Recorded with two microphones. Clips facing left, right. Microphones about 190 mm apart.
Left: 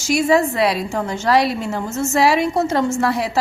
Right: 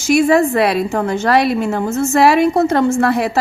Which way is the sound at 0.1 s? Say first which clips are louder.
Right 4 dB; 55° right (ahead or behind).